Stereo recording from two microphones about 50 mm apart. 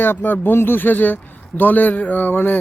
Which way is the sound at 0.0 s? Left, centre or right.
Left.